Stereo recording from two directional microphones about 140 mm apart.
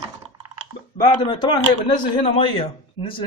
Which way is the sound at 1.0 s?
35° left (ahead or behind).